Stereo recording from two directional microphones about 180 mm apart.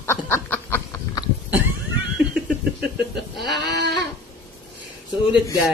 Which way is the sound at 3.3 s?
Centre (ahead or behind).